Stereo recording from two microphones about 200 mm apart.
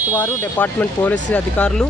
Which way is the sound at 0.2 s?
10° left (ahead or behind).